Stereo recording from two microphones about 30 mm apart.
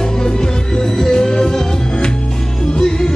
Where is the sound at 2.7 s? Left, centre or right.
Left.